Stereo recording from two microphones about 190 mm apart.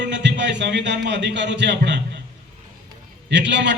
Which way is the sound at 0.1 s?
65° right (ahead or behind).